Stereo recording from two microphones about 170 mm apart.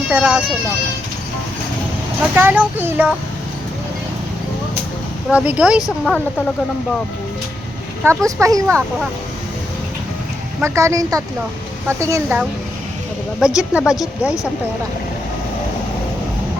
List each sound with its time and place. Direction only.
0.1 s speech: 10° right (ahead or behind)
2.3 s speech: 10° right (ahead or behind)
5.3 s speech: 5° right (ahead or behind)
8.0 s speech: 15° right (ahead or behind)
10.6 s speech: 15° right (ahead or behind)
13.4 s speech: 5° right (ahead or behind)